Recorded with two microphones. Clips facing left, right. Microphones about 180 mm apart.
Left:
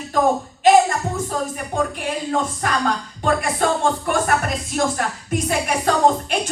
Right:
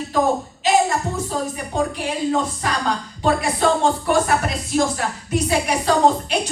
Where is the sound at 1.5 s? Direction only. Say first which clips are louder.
Right 1 dB; 50° left (ahead or behind).